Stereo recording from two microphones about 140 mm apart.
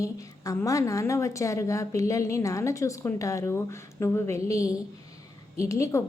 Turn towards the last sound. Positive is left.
turn(degrees=20)  # may be behind; listen again after turning